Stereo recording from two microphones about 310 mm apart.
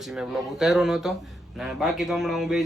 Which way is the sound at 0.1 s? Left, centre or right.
Centre.